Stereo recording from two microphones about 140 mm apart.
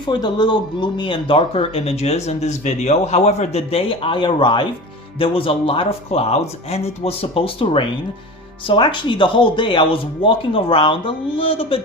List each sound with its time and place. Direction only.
0.0 s speech: 30° left (ahead or behind)